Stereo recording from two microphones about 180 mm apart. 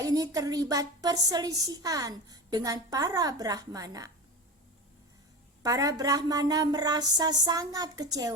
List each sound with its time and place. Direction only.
0.0 s a woman's voice: 20° right (ahead or behind)
5.6 s a woman's voice: 20° right (ahead or behind)